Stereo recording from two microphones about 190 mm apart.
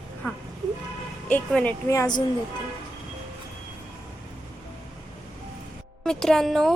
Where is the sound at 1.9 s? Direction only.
20° left (ahead or behind).